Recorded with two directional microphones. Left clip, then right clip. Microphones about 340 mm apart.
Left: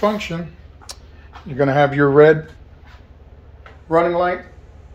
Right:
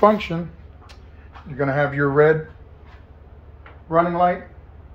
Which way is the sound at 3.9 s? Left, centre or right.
Left.